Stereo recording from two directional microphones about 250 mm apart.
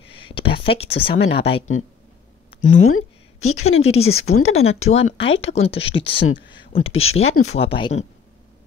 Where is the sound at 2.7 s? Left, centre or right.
Left.